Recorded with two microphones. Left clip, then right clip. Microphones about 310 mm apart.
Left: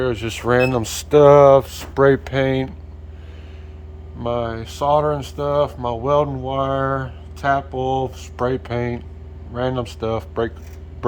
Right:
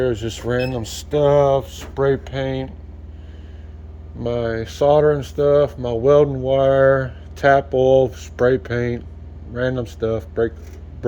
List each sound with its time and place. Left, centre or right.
0.0 s speech: centre
4.2 s speech: centre